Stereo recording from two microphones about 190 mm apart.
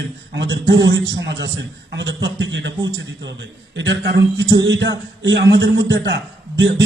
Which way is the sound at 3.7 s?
70° right (ahead or behind).